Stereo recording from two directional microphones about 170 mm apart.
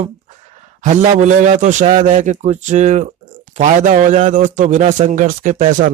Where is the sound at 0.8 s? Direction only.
45° right (ahead or behind).